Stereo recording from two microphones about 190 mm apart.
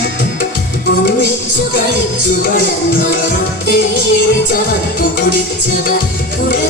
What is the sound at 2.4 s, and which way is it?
Music, 50° left (ahead or behind).